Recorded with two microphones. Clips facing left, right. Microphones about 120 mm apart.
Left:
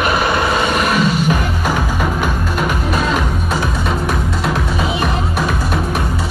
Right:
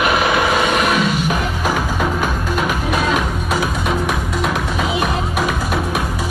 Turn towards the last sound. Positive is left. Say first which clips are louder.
# left 1 dB
turn(degrees=-5)  # may be behind; listen again after turning